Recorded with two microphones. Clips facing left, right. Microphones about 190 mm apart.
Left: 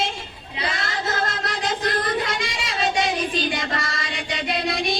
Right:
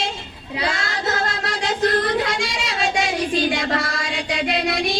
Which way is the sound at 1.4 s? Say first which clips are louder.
Right 4 dB; 70° right (ahead or behind).